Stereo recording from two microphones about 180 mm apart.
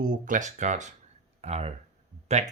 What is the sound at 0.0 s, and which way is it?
Speech, 45° right (ahead or behind).